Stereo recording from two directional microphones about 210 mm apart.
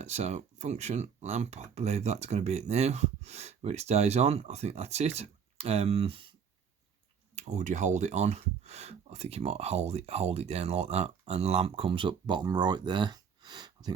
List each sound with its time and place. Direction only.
0.0 s speech: 30° right (ahead or behind)
7.3 s speech: 35° right (ahead or behind)